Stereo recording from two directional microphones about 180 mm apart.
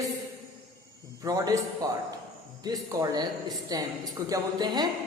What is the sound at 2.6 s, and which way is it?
Speech, 20° right (ahead or behind).